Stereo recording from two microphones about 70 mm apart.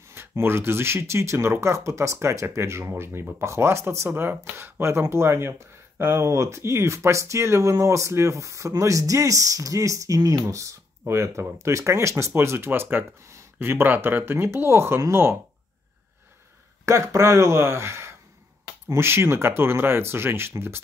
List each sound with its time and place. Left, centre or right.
0.1 s speech: right
16.8 s speech: right